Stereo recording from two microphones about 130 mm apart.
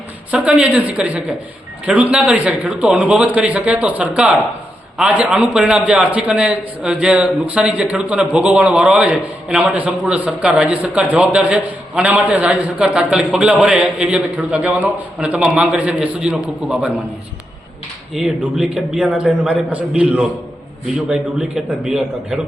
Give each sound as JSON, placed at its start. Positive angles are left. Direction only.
{"t": 0.3, "sound": "a man's voice", "side_deg": -10}
{"t": 18.1, "sound": "a man's voice", "side_deg": -5}